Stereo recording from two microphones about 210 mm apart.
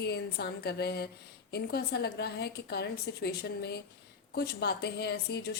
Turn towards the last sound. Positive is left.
turn(degrees=50)  # may be behind; listen again after turning